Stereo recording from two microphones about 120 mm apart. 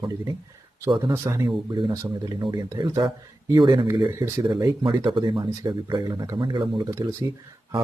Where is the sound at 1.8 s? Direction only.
40° right (ahead or behind).